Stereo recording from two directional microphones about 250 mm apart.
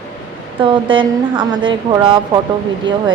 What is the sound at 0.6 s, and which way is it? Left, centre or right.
A woman's voice, centre.